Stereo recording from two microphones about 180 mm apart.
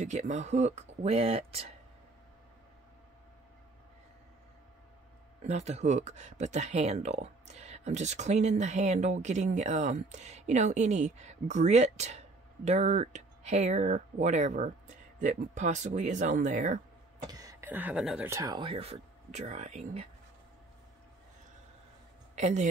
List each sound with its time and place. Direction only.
0.0 s speech: 40° right (ahead or behind)
5.4 s speech: 40° right (ahead or behind)
17.3 s speech: 20° right (ahead or behind)
18.3 s speech: 20° right (ahead or behind); by 20.1 s 40° right (ahead or behind)
22.3 s speech: 40° right (ahead or behind)